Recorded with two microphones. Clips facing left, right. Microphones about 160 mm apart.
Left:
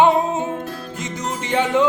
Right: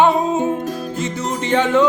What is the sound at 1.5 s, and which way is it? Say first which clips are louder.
Music: right 3 dB; 15° left (ahead or behind).